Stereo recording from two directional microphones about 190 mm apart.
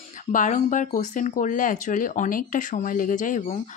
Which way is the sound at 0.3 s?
40° left (ahead or behind).